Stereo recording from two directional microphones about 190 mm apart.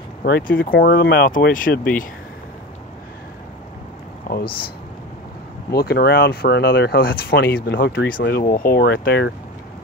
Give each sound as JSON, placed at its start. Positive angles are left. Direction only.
{"t": 0.2, "sound": "speech", "side_deg": 50}
{"t": 5.7, "sound": "speech", "side_deg": 55}
{"t": 7.6, "sound": "speech", "side_deg": 65}